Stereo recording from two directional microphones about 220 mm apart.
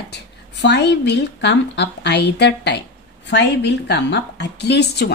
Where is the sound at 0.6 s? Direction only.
50° left (ahead or behind).